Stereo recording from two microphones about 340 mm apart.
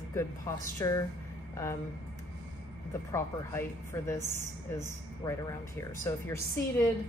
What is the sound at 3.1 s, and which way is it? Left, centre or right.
Speech, centre.